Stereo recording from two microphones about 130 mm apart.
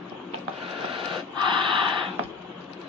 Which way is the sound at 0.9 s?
40° right (ahead or behind).